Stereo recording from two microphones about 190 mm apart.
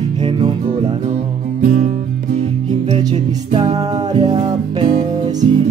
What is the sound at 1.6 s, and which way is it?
Music, 45° right (ahead or behind).